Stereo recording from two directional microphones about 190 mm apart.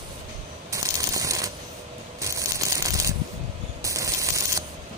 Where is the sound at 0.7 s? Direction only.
15° right (ahead or behind).